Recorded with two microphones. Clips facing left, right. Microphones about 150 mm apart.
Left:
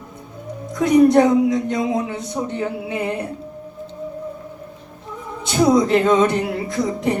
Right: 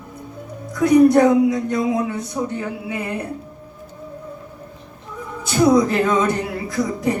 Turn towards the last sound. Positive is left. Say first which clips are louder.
# even
turn(degrees=25)  # may be behind; listen again after turning